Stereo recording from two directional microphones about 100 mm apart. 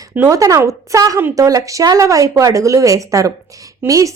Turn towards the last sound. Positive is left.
turn(degrees=-35)  # may be behind; listen again after turning